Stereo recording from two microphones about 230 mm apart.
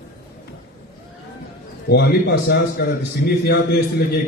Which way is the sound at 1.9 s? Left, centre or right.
Left.